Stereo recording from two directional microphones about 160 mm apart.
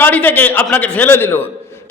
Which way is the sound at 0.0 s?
10° left (ahead or behind).